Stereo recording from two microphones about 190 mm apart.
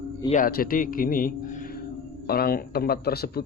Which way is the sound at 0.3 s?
45° left (ahead or behind).